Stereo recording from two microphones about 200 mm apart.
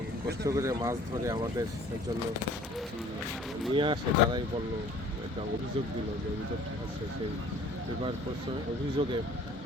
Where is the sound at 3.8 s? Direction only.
25° right (ahead or behind).